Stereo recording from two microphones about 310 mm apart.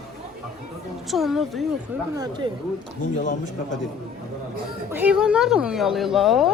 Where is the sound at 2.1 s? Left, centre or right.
Centre.